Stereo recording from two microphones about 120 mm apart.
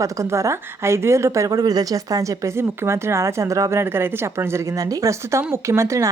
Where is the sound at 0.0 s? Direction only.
25° right (ahead or behind).